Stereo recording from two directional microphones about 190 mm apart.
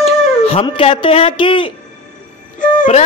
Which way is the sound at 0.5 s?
30° left (ahead or behind).